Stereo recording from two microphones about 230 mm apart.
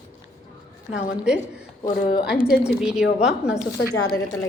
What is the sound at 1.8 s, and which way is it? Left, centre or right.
Speech, left.